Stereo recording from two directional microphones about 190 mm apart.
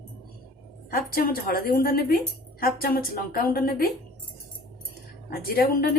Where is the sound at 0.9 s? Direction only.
50° left (ahead or behind).